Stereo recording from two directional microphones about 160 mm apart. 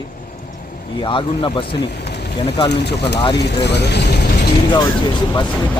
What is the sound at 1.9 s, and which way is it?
Vehicle, 90° left.